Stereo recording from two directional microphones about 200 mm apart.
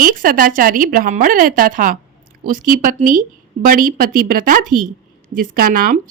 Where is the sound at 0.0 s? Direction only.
45° right (ahead or behind).